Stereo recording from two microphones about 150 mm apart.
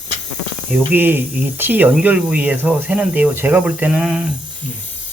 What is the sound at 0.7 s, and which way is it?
Speech, 10° right (ahead or behind).